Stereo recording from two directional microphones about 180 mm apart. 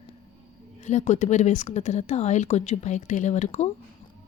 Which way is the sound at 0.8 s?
40° left (ahead or behind).